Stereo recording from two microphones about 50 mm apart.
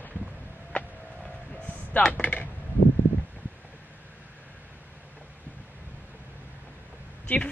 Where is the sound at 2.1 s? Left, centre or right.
Left.